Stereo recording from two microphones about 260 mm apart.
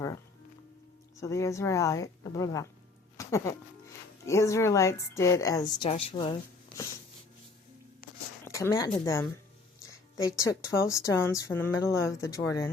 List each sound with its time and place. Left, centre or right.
1.2 s speech: centre
8.0 s a sound: left
8.4 s a woman's voice: centre